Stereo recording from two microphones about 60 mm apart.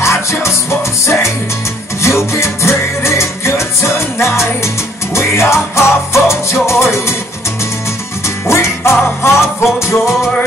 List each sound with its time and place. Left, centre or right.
0.0 s music: left
8.5 s music: left